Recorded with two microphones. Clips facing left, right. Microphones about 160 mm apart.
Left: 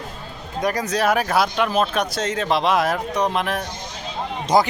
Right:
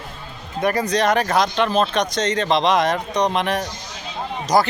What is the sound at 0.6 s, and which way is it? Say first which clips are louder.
Speech: right 3 dB; 5° right (ahead or behind).